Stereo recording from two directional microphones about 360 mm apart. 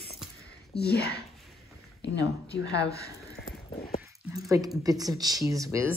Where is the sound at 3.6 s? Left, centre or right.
Centre.